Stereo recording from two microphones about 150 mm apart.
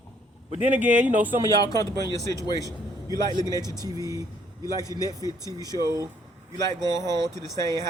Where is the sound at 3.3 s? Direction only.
25° right (ahead or behind).